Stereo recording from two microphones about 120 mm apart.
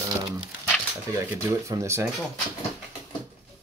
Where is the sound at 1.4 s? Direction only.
25° right (ahead or behind).